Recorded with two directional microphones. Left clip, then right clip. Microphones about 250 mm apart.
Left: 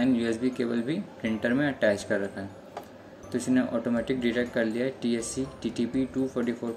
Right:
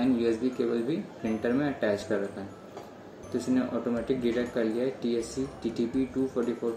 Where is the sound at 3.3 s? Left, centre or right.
Left.